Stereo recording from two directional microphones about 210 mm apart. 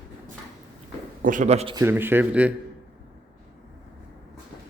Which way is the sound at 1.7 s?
10° right (ahead or behind).